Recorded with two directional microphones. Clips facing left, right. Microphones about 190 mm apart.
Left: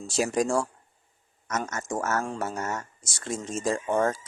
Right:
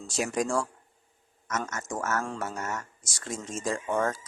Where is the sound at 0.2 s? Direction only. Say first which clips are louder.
Left 3 dB; 30° left (ahead or behind).